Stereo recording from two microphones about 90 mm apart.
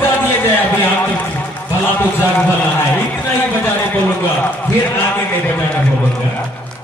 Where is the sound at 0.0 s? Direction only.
25° left (ahead or behind).